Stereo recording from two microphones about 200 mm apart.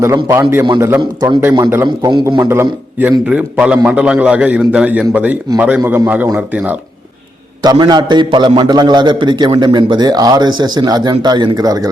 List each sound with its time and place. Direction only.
0.0 s a man's voice: 15° right (ahead or behind)
7.6 s a man's voice: 20° right (ahead or behind)